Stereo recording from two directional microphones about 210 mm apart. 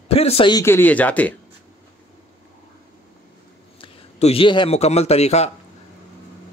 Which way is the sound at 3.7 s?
25° left (ahead or behind).